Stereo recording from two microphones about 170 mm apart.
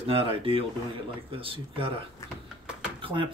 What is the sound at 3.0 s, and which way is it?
Speech, 30° right (ahead or behind).